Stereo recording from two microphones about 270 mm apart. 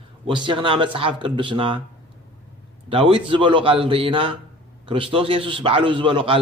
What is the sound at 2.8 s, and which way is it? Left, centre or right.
A man's voice, centre.